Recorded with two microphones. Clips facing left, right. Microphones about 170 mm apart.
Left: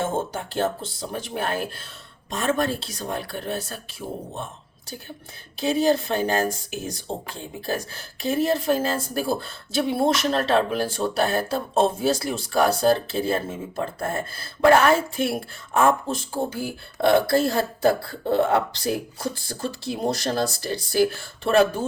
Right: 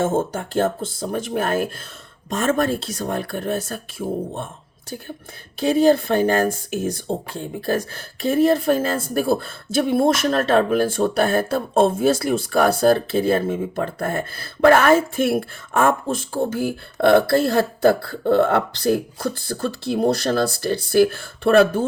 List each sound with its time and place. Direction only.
0.0 s speech: 45° right (ahead or behind)
5.5 s speech: 55° right (ahead or behind)